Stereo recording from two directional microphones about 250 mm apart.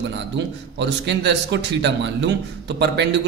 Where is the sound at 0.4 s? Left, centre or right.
Right.